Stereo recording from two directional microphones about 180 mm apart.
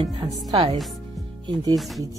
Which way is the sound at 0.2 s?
25° right (ahead or behind).